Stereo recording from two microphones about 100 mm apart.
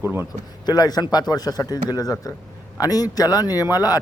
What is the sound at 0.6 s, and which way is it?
Speech, 40° left (ahead or behind).